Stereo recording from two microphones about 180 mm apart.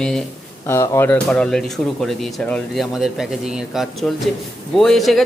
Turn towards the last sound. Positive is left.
turn(degrees=0)  # may be behind; listen again after turning